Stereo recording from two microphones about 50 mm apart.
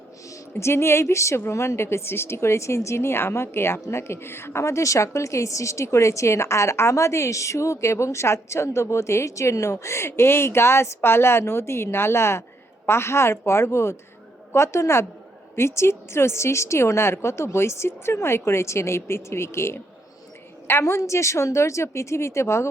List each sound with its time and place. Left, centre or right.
0.6 s a woman's voice: left
4.6 s a woman's voice: left